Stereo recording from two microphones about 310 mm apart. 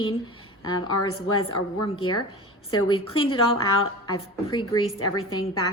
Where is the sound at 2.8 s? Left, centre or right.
Centre.